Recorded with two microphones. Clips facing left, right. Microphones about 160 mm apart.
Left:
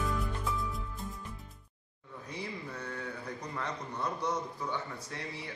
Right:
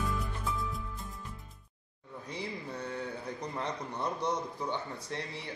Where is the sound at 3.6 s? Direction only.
25° right (ahead or behind).